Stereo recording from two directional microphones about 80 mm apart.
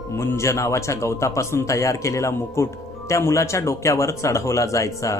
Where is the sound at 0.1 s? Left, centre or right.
Left.